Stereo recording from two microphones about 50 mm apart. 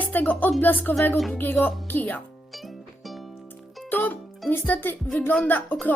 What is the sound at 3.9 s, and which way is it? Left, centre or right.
Speech, left.